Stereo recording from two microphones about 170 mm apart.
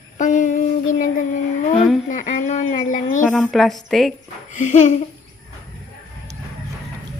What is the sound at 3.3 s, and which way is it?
Speech, 5° left (ahead or behind).